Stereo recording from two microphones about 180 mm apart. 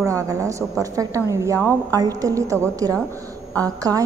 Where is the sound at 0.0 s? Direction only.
15° right (ahead or behind).